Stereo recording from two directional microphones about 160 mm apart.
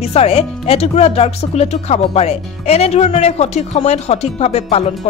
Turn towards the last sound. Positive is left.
turn(degrees=40)  # may be behind; listen again after turning